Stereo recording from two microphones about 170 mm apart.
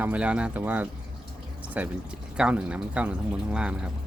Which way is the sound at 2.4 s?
5° right (ahead or behind).